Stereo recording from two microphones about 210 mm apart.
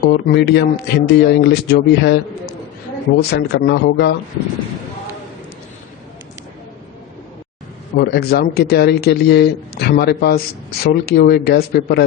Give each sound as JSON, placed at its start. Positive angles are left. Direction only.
{"t": 0.0, "sound": "speech", "side_deg": 50}
{"t": 3.2, "sound": "speech", "side_deg": 50}
{"t": 7.9, "sound": "speech", "side_deg": 50}